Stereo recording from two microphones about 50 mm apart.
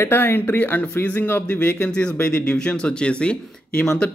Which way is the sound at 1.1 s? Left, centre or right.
Left.